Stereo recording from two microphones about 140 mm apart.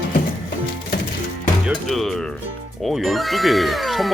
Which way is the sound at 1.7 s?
Centre (ahead or behind).